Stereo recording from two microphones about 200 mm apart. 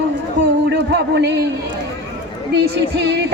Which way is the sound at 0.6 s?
55° right (ahead or behind).